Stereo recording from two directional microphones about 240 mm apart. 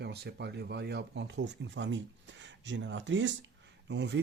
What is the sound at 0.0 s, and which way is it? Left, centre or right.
Speech, right.